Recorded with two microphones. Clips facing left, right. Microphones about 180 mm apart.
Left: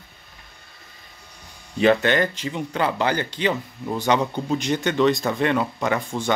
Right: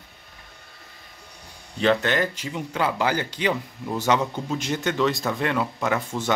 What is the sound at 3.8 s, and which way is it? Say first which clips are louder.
Speech: left 2 dB; 10° left (ahead or behind).